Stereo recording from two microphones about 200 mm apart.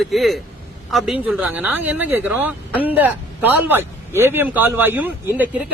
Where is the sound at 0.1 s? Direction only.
Centre (ahead or behind).